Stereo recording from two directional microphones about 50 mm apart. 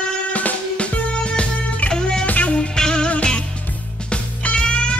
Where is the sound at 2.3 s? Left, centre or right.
Left.